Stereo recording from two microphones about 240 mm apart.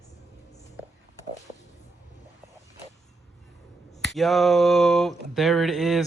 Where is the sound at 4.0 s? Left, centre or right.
Centre.